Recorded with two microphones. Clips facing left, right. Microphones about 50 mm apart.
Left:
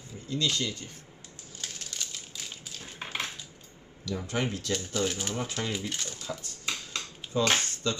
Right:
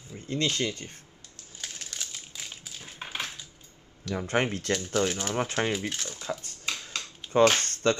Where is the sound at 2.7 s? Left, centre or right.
Centre.